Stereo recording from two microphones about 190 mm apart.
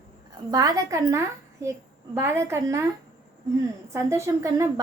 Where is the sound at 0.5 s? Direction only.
20° right (ahead or behind).